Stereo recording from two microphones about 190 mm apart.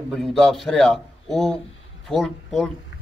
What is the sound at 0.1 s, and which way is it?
A man's voice, centre (ahead or behind).